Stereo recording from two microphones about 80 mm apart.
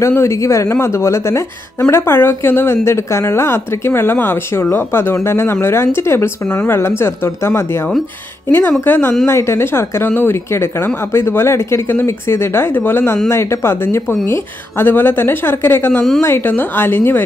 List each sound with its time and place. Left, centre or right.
0.0 s a woman's voice: left
9.2 s a woman's voice: left